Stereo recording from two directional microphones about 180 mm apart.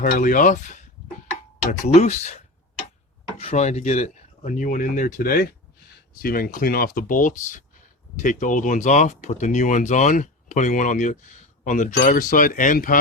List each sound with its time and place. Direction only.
0.0 s speech: 50° left (ahead or behind)
1.8 s speech: 40° left (ahead or behind)